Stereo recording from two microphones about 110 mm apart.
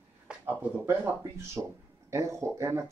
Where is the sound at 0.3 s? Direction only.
15° right (ahead or behind).